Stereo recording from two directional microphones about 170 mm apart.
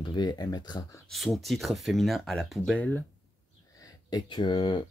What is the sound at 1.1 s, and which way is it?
Speech, centre (ahead or behind).